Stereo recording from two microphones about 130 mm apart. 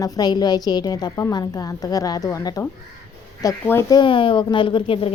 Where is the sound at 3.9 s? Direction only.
40° left (ahead or behind).